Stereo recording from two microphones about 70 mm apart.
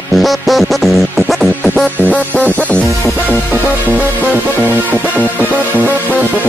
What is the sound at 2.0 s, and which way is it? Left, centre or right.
Music, centre.